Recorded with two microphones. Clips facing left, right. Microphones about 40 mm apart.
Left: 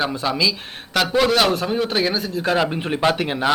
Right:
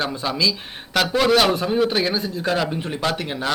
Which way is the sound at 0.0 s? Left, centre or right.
Centre.